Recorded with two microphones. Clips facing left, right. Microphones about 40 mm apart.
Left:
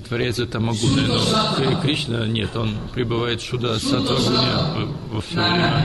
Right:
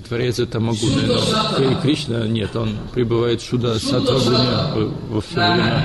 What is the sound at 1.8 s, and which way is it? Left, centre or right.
Speech, centre.